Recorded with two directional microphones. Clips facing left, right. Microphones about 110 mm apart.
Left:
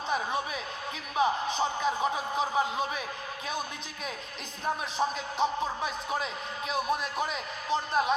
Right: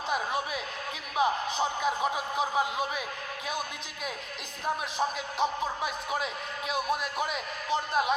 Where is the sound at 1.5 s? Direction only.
10° right (ahead or behind).